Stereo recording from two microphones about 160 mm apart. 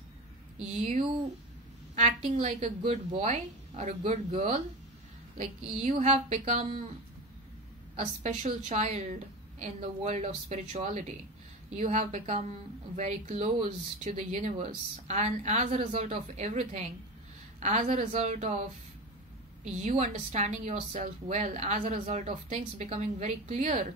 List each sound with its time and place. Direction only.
2.0 s a woman's voice: 45° right (ahead or behind)
8.0 s a woman's voice: 50° right (ahead or behind)
19.6 s a woman's voice: 45° right (ahead or behind)